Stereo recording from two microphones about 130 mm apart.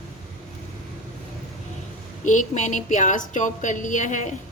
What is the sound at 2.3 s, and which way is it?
A woman's voice, 70° left (ahead or behind).